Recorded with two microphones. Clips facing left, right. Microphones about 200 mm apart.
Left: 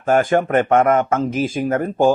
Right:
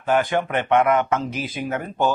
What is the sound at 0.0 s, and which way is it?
A man's voice, 45° left (ahead or behind).